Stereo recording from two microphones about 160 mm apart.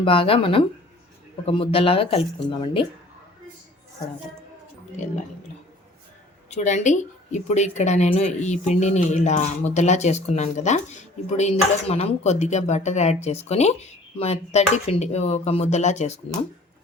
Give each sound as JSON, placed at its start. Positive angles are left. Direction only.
{"t": 0.0, "sound": "speech", "side_deg": 35}
{"t": 6.5, "sound": "speech", "side_deg": 50}